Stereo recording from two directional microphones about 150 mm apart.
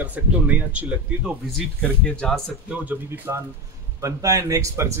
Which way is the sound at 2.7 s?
10° right (ahead or behind).